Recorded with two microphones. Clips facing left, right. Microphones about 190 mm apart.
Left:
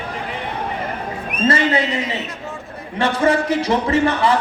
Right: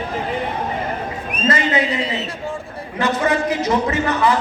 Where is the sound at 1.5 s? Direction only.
30° left (ahead or behind).